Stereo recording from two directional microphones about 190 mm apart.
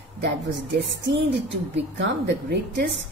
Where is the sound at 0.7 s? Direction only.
65° right (ahead or behind).